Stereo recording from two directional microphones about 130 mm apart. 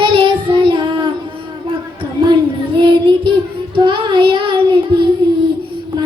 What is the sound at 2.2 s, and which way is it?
Child singing, 35° right (ahead or behind).